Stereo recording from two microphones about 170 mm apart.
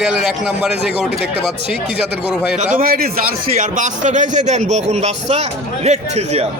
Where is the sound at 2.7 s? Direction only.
60° right (ahead or behind); by 6.5 s 40° right (ahead or behind).